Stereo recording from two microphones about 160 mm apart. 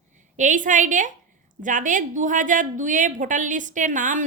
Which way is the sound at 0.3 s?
50° right (ahead or behind).